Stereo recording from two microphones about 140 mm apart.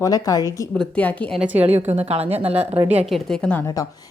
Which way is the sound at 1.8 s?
50° right (ahead or behind).